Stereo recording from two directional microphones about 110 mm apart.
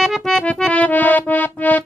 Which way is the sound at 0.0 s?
5° left (ahead or behind).